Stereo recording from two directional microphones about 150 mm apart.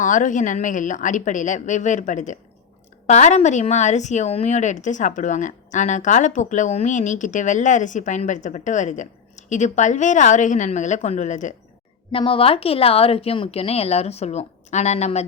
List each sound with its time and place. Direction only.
0.0 s a woman's voice: 60° left (ahead or behind)
12.1 s speech: 35° left (ahead or behind)